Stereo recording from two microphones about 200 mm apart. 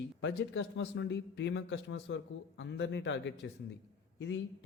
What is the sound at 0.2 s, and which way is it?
Speech, 65° left (ahead or behind).